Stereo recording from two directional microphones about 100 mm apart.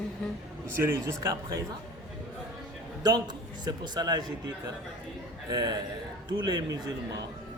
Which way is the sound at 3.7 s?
40° right (ahead or behind).